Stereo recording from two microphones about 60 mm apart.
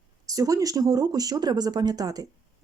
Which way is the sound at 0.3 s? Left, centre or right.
Right.